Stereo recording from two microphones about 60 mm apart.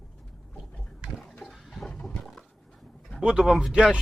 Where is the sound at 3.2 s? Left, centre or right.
Centre.